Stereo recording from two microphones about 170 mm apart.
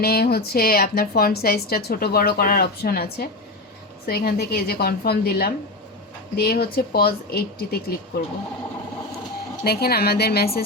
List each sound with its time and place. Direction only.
0.0 s a woman's voice: 65° left (ahead or behind)
9.6 s speech: 65° left (ahead or behind)